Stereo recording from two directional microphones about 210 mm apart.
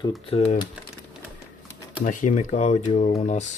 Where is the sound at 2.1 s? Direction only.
35° left (ahead or behind).